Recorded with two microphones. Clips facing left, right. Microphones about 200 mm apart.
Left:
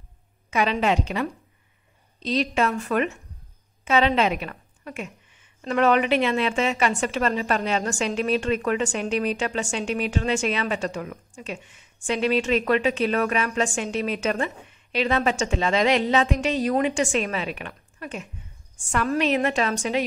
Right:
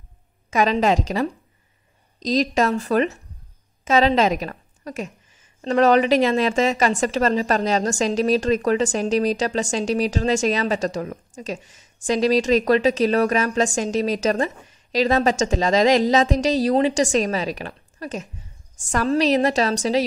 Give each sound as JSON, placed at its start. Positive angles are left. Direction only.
{"t": 0.5, "sound": "a woman's voice", "side_deg": -40}